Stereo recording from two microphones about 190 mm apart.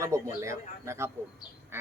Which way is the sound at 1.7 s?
10° right (ahead or behind).